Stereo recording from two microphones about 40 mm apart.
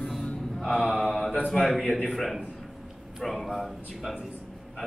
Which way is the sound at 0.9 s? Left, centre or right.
Centre.